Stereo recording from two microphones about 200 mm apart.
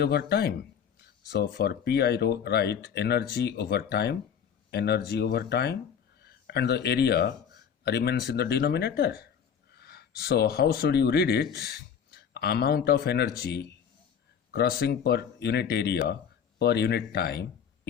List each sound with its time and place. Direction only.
0.0 s speech: 55° left (ahead or behind)